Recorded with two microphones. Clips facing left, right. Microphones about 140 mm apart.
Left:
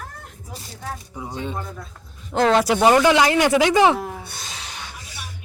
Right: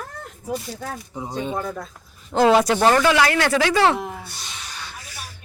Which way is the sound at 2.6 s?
15° left (ahead or behind).